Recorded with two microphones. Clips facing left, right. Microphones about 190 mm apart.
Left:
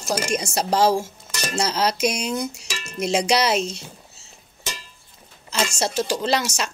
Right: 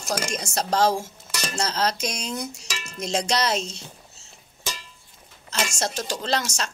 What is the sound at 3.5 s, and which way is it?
Speech, 60° left (ahead or behind).